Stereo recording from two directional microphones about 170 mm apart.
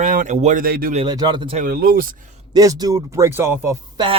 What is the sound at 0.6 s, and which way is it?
Speech, 60° right (ahead or behind).